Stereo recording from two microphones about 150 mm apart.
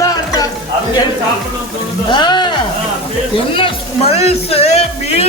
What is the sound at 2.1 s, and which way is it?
Speech, 30° left (ahead or behind).